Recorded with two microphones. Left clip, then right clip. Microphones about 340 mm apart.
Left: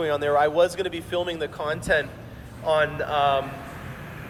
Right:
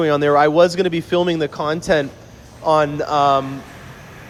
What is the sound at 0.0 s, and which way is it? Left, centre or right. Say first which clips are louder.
A man's voice: right 7 dB; right.